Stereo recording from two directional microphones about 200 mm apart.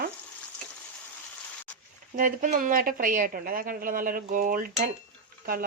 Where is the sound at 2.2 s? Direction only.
40° right (ahead or behind).